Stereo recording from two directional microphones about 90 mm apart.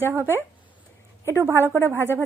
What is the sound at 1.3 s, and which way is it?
Speech, 25° right (ahead or behind).